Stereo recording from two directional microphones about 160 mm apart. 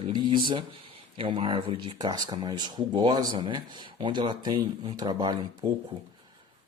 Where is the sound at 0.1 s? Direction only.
30° right (ahead or behind).